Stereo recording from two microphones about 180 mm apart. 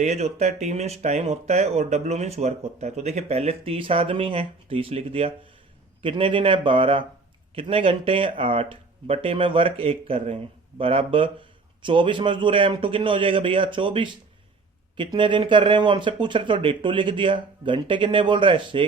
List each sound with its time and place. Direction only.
0.0 s speech: 35° right (ahead or behind)